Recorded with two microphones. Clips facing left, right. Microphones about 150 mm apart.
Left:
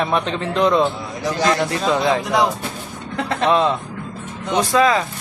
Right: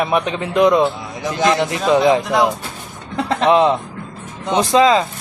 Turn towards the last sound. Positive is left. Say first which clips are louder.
# right 3 dB
turn(degrees=-20)  # may be behind; listen again after turning